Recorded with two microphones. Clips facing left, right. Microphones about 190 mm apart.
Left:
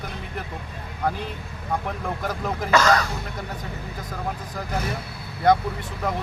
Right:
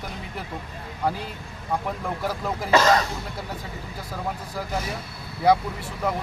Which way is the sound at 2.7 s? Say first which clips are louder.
Right 1 dB; 25° right (ahead or behind).